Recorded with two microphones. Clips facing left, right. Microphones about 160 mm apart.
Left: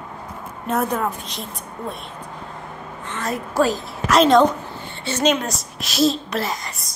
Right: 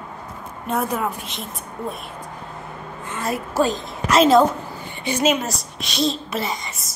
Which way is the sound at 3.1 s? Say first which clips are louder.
Even; 10° right (ahead or behind).